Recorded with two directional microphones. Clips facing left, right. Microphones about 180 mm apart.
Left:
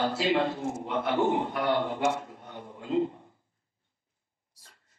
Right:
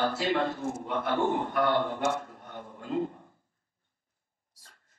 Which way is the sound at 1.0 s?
50° right (ahead or behind).